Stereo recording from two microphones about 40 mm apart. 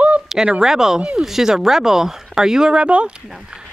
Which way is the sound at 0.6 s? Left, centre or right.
Centre.